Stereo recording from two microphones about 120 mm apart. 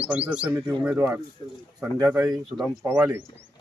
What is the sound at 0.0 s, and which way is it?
Speech, 10° right (ahead or behind).